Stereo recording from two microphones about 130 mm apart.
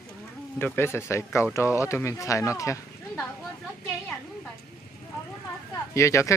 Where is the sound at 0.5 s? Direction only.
15° left (ahead or behind).